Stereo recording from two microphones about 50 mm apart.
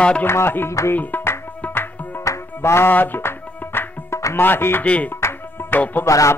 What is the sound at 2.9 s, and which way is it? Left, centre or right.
Music, left.